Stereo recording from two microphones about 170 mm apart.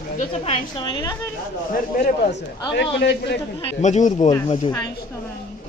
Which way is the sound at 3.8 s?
45° left (ahead or behind).